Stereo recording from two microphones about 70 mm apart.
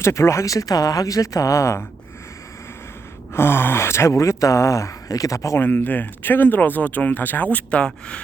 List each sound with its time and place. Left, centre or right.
0.0 s speech: left
3.3 s speech: left
5.5 s speech: left; by 8.2 s centre